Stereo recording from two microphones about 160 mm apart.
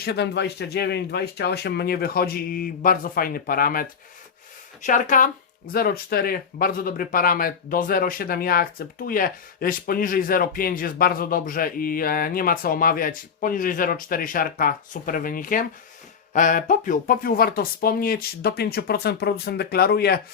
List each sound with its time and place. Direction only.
0.0 s speech: 90° left; by 3.8 s 65° left (ahead or behind)
4.8 s speech: 50° left (ahead or behind)
5.7 s speech: 70° left (ahead or behind)